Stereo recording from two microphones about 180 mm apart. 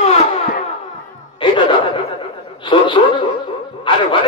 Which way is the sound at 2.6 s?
25° left (ahead or behind).